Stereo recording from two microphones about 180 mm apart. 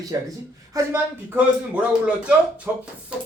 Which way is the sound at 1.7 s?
5° right (ahead or behind).